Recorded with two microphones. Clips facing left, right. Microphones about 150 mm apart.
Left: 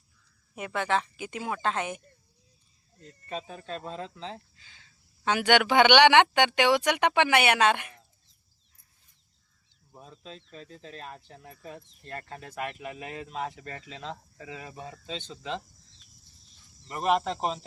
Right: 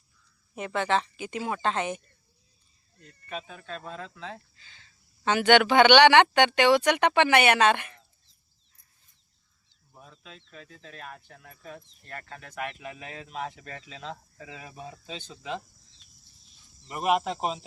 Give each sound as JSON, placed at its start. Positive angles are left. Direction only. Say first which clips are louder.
{"t": 0.5, "sound": "speech", "louder": "right 2 dB", "side_deg": 10}
{"t": 3.0, "sound": "speech", "louder": "left 1 dB", "side_deg": 30}
{"t": 4.4, "sound": "speech", "louder": "left 1 dB", "side_deg": 10}
{"t": 9.9, "sound": "speech", "louder": "left 4 dB", "side_deg": 30}
{"t": 12.8, "sound": "speech", "louder": "left 3 dB", "side_deg": 5}
{"t": 16.8, "sound": "speech", "louder": "even", "side_deg": -5}